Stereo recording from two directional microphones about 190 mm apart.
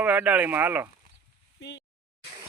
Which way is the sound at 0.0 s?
10° right (ahead or behind).